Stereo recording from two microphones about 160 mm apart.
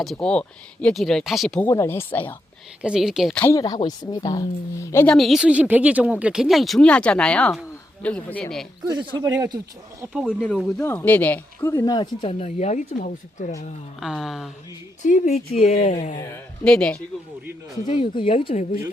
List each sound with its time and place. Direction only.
0.0 s speech: 5° left (ahead or behind)
1.6 s speech: 15° left (ahead or behind)
2.8 s speech: 5° right (ahead or behind)
3.4 s speech: 20° left (ahead or behind)
5.0 s speech: centre (ahead or behind)
9.2 s speech: 20° right (ahead or behind)
10.1 s speech: 5° right (ahead or behind); by 13.5 s 50° left (ahead or behind)
14.0 s speech: centre (ahead or behind)
15.0 s speech: 50° left (ahead or behind)
16.6 s speech: 5° left (ahead or behind)
17.8 s speech: 30° left (ahead or behind)